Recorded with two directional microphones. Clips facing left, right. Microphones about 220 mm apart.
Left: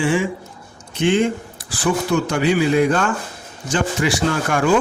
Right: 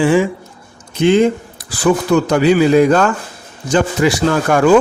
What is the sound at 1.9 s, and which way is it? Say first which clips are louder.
Speech: right 6 dB; 90° right.